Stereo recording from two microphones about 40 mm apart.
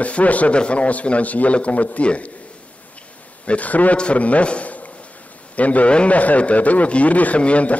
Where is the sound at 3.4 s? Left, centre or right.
Left.